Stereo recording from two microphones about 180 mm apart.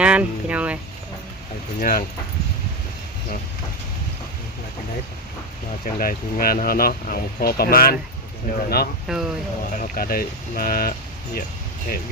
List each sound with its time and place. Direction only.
0.0 s a sound: 5° right (ahead or behind)
1.8 s speech: 55° left (ahead or behind)
5.8 s speech: 50° left (ahead or behind)
9.0 s speech: 5° right (ahead or behind)
9.7 s speech: 50° left (ahead or behind)